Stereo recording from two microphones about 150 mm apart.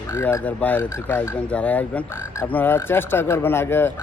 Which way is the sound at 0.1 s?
15° left (ahead or behind).